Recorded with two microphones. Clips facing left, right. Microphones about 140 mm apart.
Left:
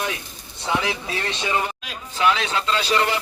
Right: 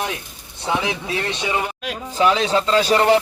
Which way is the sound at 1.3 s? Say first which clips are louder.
Left 3 dB; 10° right (ahead or behind).